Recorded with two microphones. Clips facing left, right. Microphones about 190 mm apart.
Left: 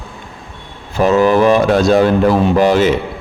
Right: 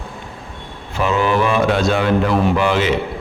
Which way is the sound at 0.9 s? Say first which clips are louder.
Left 6 dB; 40° left (ahead or behind).